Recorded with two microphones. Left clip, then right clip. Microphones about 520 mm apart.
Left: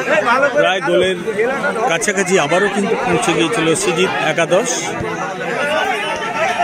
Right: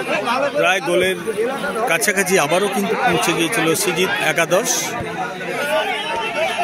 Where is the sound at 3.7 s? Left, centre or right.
Right.